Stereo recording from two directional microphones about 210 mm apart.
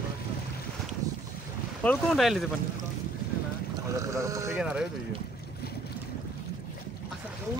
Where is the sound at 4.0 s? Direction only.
15° right (ahead or behind).